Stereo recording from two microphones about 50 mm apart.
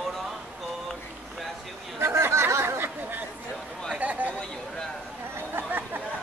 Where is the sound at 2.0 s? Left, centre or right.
Right.